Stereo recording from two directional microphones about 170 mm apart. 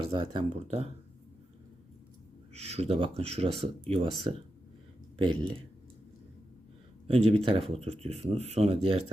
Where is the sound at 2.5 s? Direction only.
40° right (ahead or behind).